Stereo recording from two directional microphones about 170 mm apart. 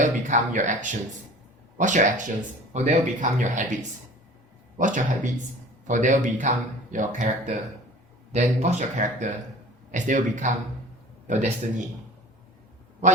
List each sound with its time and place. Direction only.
0.0 s speech: 45° right (ahead or behind)
4.8 s speech: 50° right (ahead or behind)